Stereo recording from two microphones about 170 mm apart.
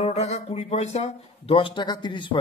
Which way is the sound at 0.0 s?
40° left (ahead or behind).